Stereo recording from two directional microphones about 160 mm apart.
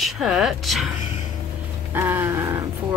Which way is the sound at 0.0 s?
Centre (ahead or behind).